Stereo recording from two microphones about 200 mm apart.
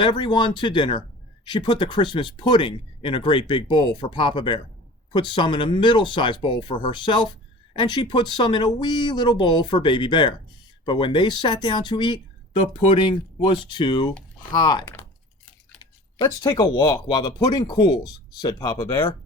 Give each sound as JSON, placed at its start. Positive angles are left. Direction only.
{"t": 0.0, "sound": "speech", "side_deg": 25}